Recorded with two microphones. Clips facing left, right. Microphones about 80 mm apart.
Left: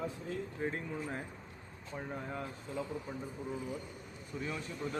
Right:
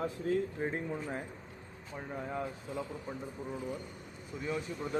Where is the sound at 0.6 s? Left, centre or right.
Right.